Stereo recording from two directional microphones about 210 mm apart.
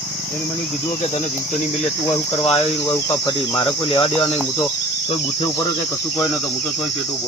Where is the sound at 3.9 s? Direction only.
25° left (ahead or behind).